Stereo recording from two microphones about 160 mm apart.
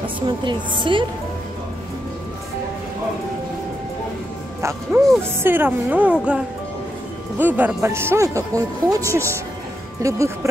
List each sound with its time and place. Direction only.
0.0 s a woman's voice: 30° right (ahead or behind)
4.6 s speech: 15° right (ahead or behind)